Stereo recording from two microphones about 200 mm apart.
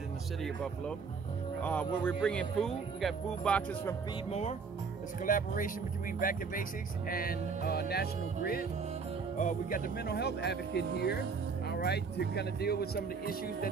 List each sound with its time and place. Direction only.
1.6 s speech: 5° left (ahead or behind)
4.3 s speech: 35° left (ahead or behind)